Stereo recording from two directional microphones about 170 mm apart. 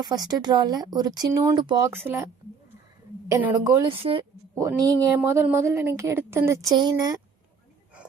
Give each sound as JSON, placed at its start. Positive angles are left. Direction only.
{"t": 0.0, "sound": "speech", "side_deg": -25}
{"t": 3.2, "sound": "speech", "side_deg": -20}
{"t": 3.8, "sound": "a woman's voice", "side_deg": -30}
{"t": 4.5, "sound": "speech", "side_deg": -20}